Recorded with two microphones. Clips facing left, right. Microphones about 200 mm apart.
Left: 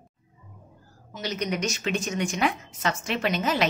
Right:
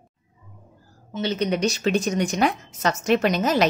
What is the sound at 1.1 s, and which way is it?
A woman's voice, 30° right (ahead or behind).